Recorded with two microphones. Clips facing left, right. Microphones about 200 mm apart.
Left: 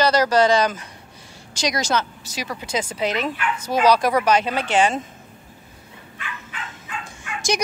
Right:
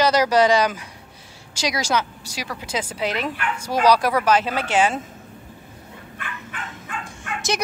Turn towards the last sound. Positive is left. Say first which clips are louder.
# right 2 dB
turn(degrees=-55)  # may be behind; listen again after turning